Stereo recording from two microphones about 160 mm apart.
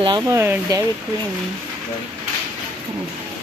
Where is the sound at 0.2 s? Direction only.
15° right (ahead or behind).